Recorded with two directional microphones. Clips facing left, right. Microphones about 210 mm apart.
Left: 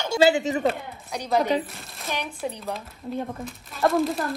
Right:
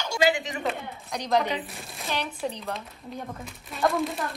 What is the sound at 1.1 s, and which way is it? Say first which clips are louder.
Speech: even; 10° left (ahead or behind).